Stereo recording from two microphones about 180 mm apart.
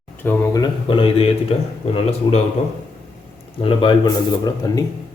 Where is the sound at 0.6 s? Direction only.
30° left (ahead or behind).